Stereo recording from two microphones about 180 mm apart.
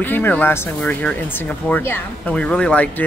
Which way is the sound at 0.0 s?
10° left (ahead or behind).